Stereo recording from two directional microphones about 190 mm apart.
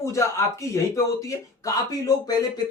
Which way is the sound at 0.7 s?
15° left (ahead or behind).